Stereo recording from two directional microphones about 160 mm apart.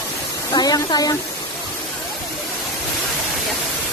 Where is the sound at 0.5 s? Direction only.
25° left (ahead or behind).